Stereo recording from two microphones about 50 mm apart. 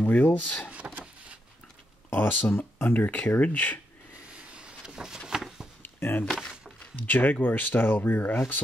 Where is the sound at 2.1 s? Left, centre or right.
Left.